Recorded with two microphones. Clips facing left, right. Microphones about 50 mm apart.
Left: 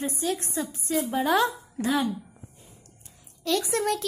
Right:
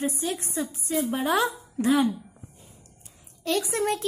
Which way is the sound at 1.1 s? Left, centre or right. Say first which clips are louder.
Left 3 dB; right.